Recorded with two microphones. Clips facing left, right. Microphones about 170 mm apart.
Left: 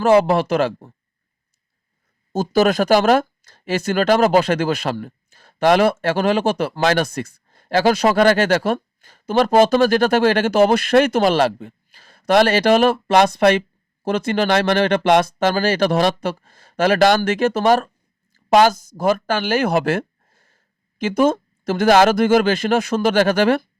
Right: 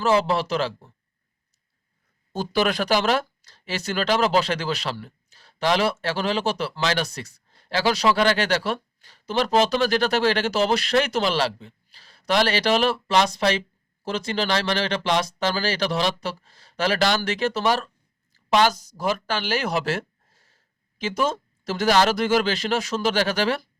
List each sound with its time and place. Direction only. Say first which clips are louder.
0.0 s speech: left 7 dB; 55° left (ahead or behind)
2.3 s speech: left 7 dB; 45° left (ahead or behind)